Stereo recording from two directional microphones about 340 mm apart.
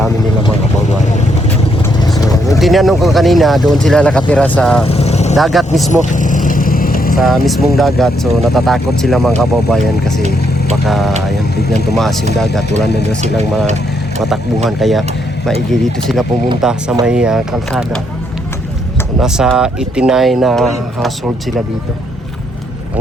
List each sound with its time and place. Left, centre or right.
2.1 s vehicle: centre
2.6 s speech: centre
4.9 s vehicle: centre
5.4 s speech: centre
5.9 s vehicle: left
7.2 s speech: centre
10.8 s speech: centre
14.8 s speech: centre
19.2 s speech: centre